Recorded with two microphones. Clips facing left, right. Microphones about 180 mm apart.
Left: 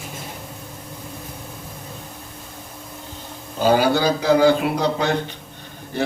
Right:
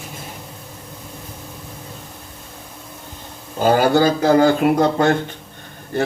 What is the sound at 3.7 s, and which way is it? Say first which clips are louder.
Speech: right 3 dB; 50° right (ahead or behind).